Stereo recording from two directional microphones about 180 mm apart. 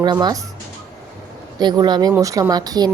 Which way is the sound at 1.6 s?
25° right (ahead or behind).